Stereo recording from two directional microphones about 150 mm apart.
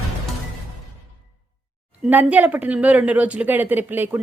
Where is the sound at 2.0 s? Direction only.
10° right (ahead or behind).